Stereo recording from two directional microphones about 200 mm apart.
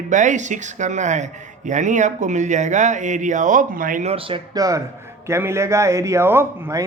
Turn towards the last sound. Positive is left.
turn(degrees=-10)  # may be behind; listen again after turning